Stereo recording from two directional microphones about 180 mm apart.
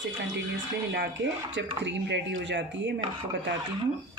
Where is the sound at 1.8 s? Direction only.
75° right (ahead or behind).